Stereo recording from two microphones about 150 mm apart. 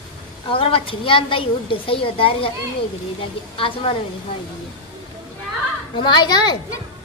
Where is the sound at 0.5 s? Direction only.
35° left (ahead or behind).